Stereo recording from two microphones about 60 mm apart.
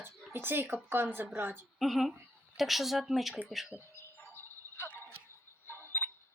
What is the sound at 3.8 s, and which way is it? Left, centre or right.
Fowl, left.